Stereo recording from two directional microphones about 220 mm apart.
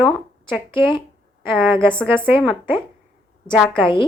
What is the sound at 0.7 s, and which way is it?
Speech, 20° left (ahead or behind).